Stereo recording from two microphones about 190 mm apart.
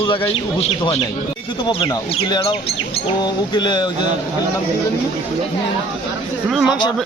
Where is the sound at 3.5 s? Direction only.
25° left (ahead or behind).